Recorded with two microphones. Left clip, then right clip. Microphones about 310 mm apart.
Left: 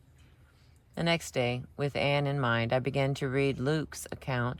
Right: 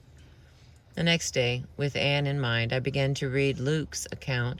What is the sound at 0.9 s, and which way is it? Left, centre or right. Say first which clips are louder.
Speech: right 3 dB; centre.